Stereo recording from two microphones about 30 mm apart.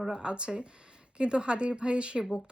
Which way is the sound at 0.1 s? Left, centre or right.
Right.